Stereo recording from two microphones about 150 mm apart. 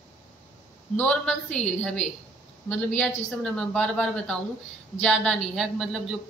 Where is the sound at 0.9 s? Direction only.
5° left (ahead or behind).